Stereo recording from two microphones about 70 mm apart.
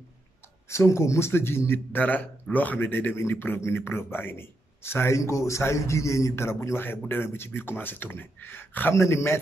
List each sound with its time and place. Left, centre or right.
0.7 s speech: left
8.9 s speech: left